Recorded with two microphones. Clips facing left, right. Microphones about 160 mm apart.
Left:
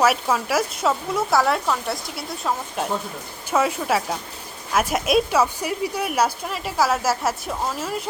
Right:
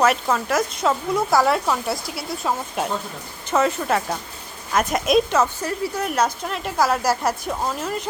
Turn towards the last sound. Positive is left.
turn(degrees=5)  # may be behind; listen again after turning